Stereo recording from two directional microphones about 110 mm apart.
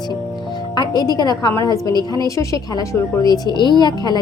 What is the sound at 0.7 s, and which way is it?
Speech, 40° left (ahead or behind).